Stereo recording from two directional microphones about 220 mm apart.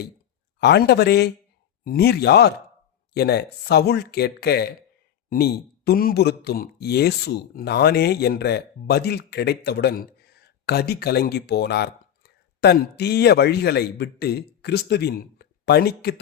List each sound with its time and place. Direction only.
0.6 s speech: 50° left (ahead or behind)